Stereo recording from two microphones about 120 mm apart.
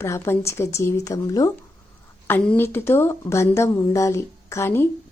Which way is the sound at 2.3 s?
15° left (ahead or behind).